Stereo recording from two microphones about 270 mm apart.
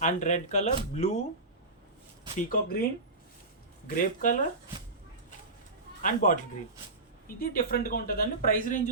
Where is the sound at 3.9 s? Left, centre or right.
Left.